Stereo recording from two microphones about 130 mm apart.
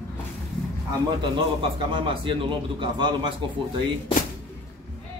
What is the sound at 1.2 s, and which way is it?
A man's voice, 40° right (ahead or behind).